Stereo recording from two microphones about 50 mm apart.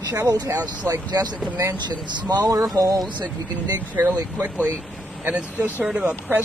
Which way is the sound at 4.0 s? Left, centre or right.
Right.